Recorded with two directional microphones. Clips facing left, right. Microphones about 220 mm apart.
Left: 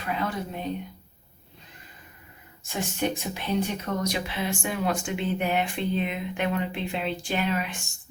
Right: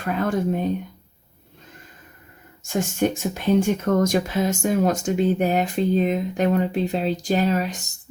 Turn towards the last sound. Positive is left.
turn(degrees=-40)  # may be behind; listen again after turning